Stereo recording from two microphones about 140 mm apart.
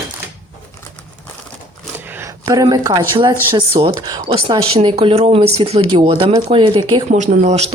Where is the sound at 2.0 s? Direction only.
15° right (ahead or behind).